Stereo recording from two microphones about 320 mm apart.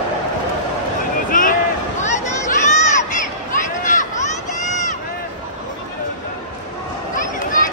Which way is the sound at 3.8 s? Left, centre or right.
Left.